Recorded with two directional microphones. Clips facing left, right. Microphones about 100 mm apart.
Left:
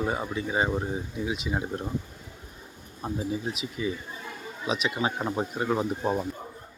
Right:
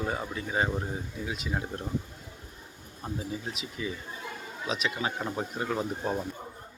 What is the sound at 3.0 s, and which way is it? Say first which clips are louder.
Speech: left 5 dB; 25° left (ahead or behind).